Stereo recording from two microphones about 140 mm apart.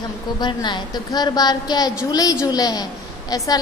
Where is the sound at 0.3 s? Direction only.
30° left (ahead or behind).